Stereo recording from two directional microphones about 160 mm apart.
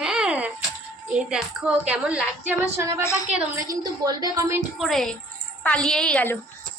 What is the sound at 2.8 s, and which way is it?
A woman's voice, 20° right (ahead or behind).